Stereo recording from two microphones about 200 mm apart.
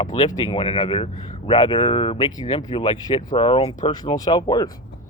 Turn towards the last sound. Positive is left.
turn(degrees=20)  # may be behind; listen again after turning